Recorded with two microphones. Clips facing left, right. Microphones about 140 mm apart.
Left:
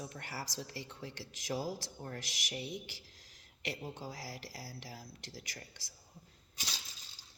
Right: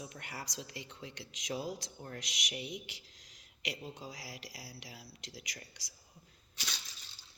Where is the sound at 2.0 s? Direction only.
35° left (ahead or behind).